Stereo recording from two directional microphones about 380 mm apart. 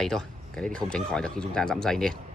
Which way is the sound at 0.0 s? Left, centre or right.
Centre.